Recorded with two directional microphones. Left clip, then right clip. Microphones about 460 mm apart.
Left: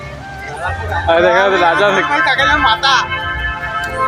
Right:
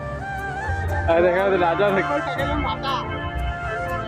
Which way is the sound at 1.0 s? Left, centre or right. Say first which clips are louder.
Left 7 dB; right.